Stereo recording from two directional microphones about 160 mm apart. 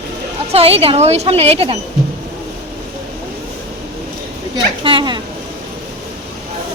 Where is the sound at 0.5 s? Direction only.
35° right (ahead or behind).